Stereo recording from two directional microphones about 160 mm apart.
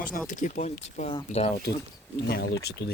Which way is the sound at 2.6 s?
90° left.